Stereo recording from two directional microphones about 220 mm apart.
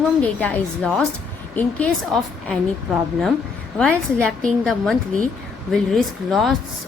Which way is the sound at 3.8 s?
5° left (ahead or behind).